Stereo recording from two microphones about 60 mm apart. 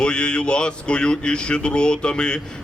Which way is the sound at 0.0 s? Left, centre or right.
Centre.